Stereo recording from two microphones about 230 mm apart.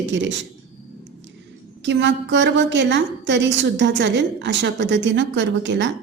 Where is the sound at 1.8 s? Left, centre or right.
Right.